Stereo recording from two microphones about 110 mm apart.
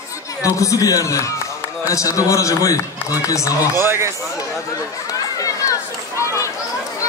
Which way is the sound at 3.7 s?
20° right (ahead or behind).